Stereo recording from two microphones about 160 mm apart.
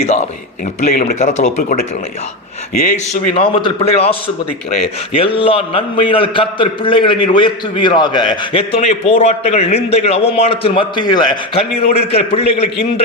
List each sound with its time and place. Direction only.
0.0 s a man's voice: 45° left (ahead or behind)
2.7 s a man's voice: 60° left (ahead or behind)
3.3 s a man's voice: 35° left (ahead or behind)
11.9 s a man's voice: 40° left (ahead or behind)